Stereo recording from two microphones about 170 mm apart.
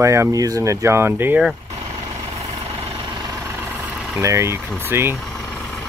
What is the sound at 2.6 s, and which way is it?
Vehicle, 30° right (ahead or behind).